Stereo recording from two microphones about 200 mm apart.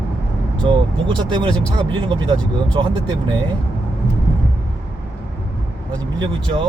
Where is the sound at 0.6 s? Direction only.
25° right (ahead or behind).